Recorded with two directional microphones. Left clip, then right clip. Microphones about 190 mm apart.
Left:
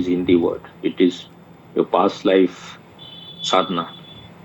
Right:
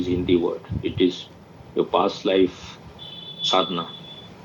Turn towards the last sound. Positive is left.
turn(degrees=50)  # may be behind; listen again after turning